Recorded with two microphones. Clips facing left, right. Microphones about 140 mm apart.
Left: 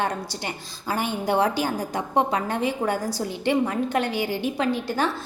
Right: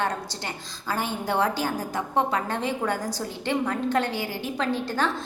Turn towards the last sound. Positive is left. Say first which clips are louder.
# left 2 dB
turn(degrees=10)  # may be behind; listen again after turning